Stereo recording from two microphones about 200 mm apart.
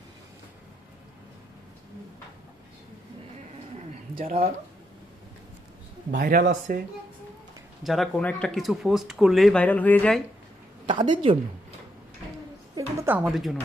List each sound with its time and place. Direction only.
4.2 s speech: 45° right (ahead or behind)
6.1 s speech: 45° right (ahead or behind)
7.8 s speech: centre (ahead or behind)
10.9 s a woman's voice: 25° right (ahead or behind)
12.7 s speech: 10° right (ahead or behind)